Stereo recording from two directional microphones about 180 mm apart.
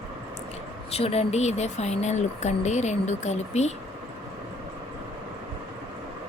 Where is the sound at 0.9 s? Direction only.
35° left (ahead or behind).